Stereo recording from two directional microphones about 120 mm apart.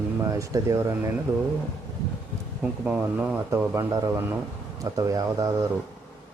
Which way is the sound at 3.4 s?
20° right (ahead or behind).